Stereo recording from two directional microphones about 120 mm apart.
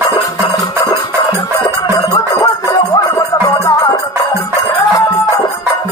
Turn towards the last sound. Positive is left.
turn(degrees=25)  # may be behind; listen again after turning